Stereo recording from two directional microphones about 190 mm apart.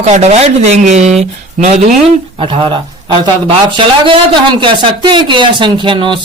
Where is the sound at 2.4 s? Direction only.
30° right (ahead or behind).